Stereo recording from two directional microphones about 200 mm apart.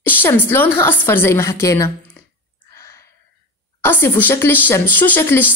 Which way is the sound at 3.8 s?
10° left (ahead or behind).